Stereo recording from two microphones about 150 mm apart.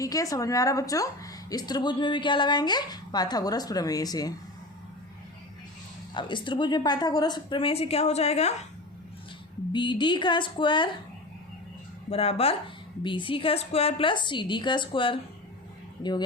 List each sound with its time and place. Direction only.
0.0 s a woman's voice: 25° left (ahead or behind)
6.1 s a woman's voice: 30° left (ahead or behind)
9.7 s a woman's voice: 30° left (ahead or behind)
12.1 s a woman's voice: 40° left (ahead or behind)